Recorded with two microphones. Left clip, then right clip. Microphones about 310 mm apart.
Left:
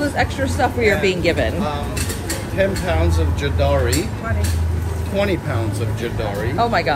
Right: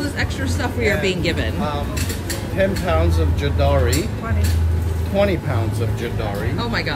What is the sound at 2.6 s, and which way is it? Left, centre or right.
Speech, right.